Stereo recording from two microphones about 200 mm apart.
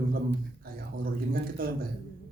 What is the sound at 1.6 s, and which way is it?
Speech, 45° right (ahead or behind).